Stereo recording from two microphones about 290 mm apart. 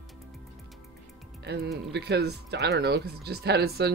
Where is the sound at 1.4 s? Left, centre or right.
Right.